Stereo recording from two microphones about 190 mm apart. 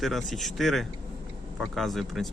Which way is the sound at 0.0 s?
Centre (ahead or behind).